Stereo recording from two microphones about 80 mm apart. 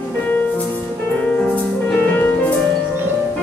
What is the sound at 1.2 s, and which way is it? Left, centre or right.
Music, centre.